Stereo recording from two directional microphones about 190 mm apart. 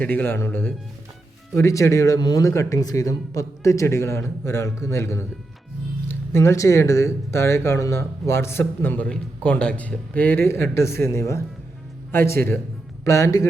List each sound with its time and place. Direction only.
0.0 s speech: 10° left (ahead or behind)